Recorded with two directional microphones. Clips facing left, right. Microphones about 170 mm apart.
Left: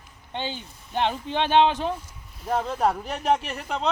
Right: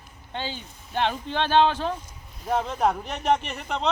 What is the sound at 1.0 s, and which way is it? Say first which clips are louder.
Speech: left 1 dB; 15° left (ahead or behind).